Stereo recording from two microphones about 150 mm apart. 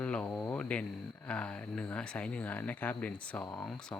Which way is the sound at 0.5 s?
10° left (ahead or behind).